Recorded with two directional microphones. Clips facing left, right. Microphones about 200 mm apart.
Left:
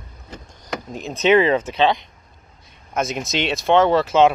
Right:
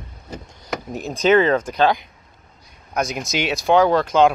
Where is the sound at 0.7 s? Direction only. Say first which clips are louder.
Right 2 dB; centre (ahead or behind).